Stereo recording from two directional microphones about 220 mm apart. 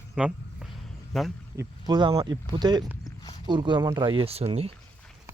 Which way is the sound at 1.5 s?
15° right (ahead or behind).